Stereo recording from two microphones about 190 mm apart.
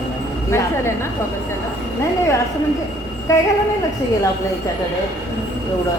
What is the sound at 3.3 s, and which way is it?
Speech, 15° left (ahead or behind).